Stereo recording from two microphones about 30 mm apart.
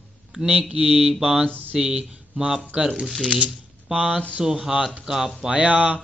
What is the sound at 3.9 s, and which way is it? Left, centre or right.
Speech, right.